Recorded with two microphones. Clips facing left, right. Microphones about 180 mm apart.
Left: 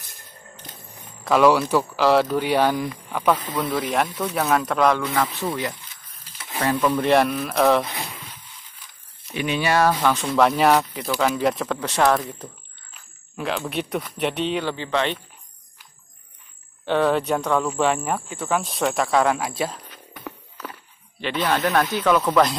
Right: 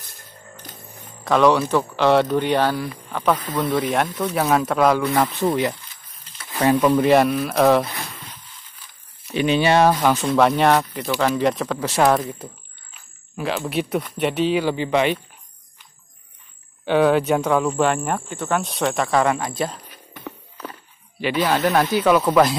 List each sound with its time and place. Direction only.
1.2 s speech: 5° left (ahead or behind)
5.0 s speech: 25° right (ahead or behind)
6.6 s speech: 10° right (ahead or behind)
9.3 s speech: 30° right (ahead or behind)
10.0 s speech: 5° right (ahead or behind)
16.8 s speech: 5° right (ahead or behind)